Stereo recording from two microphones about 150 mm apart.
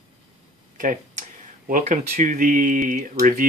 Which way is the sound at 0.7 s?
60° right (ahead or behind).